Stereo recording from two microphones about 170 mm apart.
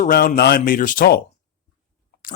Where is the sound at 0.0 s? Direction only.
55° left (ahead or behind).